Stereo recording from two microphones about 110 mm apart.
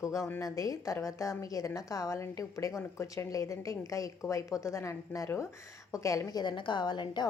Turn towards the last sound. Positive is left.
turn(degrees=40)  # may be behind; listen again after turning